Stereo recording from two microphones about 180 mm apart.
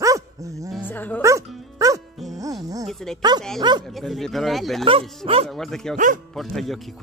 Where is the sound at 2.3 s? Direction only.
20° right (ahead or behind).